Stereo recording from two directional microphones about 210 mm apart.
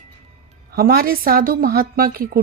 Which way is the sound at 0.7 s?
45° right (ahead or behind).